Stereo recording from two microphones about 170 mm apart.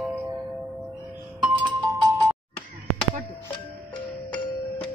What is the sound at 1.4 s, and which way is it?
Music, 5° right (ahead or behind).